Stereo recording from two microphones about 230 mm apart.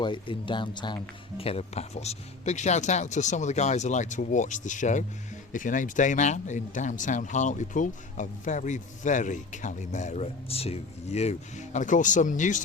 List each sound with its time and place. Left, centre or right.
0.0 s speech: left